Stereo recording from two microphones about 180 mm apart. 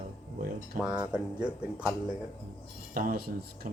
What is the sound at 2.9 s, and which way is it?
Speech, 50° right (ahead or behind).